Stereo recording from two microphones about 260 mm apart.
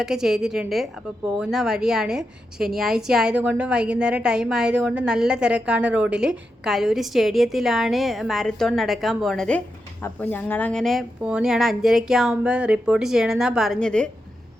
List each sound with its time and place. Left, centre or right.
0.0 s a woman's voice: centre